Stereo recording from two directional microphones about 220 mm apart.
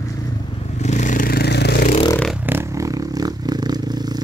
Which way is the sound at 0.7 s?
30° left (ahead or behind).